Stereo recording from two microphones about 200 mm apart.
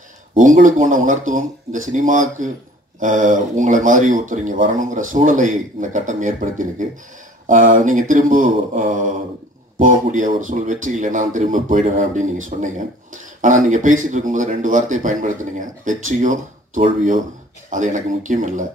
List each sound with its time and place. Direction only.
0.4 s speech: 40° right (ahead or behind)